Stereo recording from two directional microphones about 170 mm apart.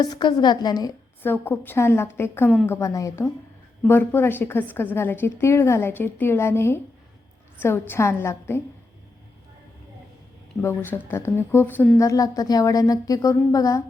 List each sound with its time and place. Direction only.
0.0 s a woman's voice: 25° left (ahead or behind)
1.2 s a woman's voice: 10° left (ahead or behind)
10.6 s a woman's voice: 15° left (ahead or behind)